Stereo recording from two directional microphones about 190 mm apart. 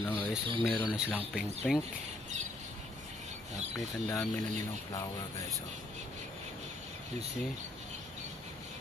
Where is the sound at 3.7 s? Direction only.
20° left (ahead or behind).